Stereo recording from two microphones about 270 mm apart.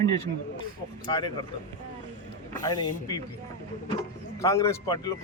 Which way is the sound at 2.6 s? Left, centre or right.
Centre.